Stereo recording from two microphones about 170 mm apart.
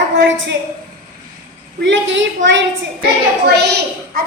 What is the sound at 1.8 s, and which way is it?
Speech, 90° right.